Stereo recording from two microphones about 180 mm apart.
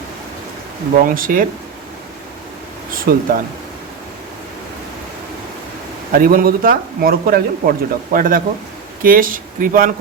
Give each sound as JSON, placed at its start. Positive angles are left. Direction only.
{"t": 0.9, "sound": "speech", "side_deg": -50}
{"t": 2.9, "sound": "speech", "side_deg": -50}
{"t": 6.1, "sound": "speech", "side_deg": -50}